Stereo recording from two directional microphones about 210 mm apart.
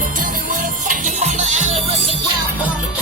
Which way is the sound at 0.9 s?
35° right (ahead or behind).